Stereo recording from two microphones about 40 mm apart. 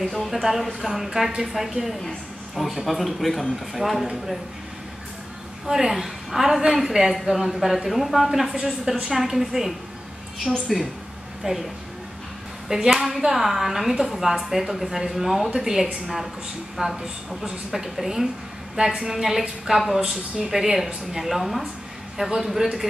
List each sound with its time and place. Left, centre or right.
0.0 s a woman's voice: centre
5.7 s a woman's voice: centre
11.4 s a woman's voice: centre
12.6 s a woman's voice: centre